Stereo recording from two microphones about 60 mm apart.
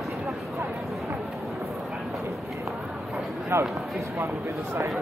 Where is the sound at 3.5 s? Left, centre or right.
Right.